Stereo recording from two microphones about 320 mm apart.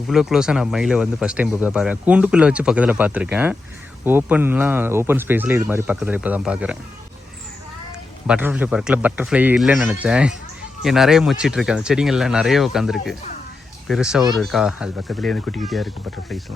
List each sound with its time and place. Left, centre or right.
0.1 s speech: centre
8.3 s speech: centre